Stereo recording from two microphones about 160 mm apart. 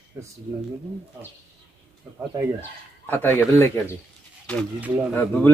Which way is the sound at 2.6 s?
15° left (ahead or behind).